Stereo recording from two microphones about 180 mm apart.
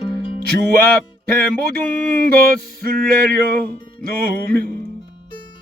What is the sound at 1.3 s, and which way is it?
Music, 55° right (ahead or behind).